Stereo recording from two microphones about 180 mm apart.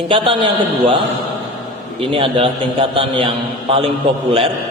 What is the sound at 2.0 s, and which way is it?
A man's voice, 30° right (ahead or behind).